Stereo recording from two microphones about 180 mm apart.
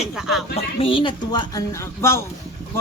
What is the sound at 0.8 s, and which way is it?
Speech, 30° left (ahead or behind).